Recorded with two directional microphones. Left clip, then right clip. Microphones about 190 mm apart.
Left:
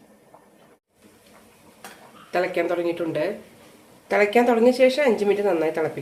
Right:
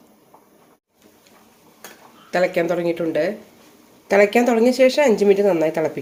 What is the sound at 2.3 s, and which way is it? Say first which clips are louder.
Speech: right 4 dB; 35° right (ahead or behind).